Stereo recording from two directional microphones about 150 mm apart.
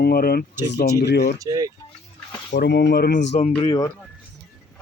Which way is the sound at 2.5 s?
90° left.